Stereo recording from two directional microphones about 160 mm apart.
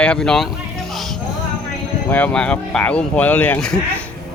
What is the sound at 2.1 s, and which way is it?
Speech, 10° left (ahead or behind).